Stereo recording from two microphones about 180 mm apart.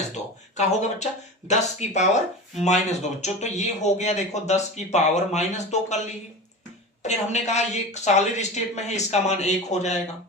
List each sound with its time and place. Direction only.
0.5 s speech: 40° left (ahead or behind)
7.0 s speech: 40° left (ahead or behind)